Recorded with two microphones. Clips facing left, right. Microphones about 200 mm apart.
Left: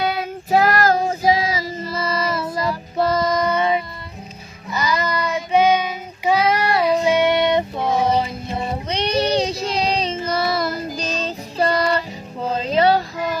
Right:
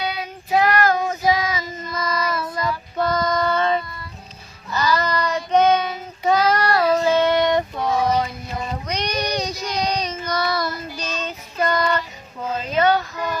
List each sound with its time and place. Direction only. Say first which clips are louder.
0.0 s child singing: left 5 dB; 50° left (ahead or behind); by 6.6 s 10° left (ahead or behind)
6.6 s female singing: even; 15° left (ahead or behind)
10.9 s music: left 4 dB; 35° left (ahead or behind)
12.4 s child singing: left 2 dB; 30° left (ahead or behind)